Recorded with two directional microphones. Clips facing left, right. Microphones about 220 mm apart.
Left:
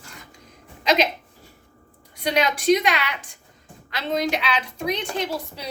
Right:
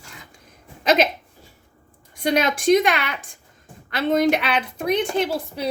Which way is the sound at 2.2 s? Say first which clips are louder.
Right 2 dB; 50° right (ahead or behind).